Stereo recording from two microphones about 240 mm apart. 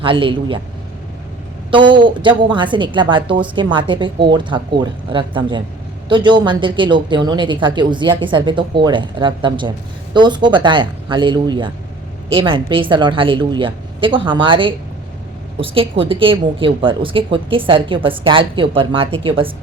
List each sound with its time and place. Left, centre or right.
0.0 s a woman's voice: right
1.7 s a woman's voice: centre